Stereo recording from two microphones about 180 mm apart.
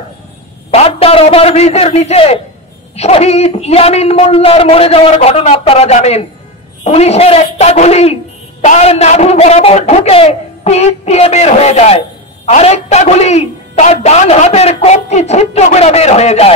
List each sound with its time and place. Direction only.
0.7 s a man's voice: 35° left (ahead or behind)